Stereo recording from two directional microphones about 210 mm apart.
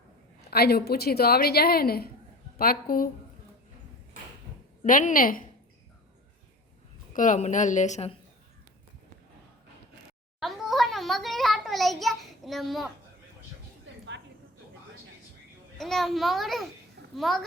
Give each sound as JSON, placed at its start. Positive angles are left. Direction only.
{"t": 0.5, "sound": "a woman's voice", "side_deg": 50}
{"t": 4.8, "sound": "a woman's voice", "side_deg": 40}
{"t": 7.1, "sound": "a woman's voice", "side_deg": 40}
{"t": 10.4, "sound": "a sound", "side_deg": 0}
{"t": 15.8, "sound": "a child's voice", "side_deg": 0}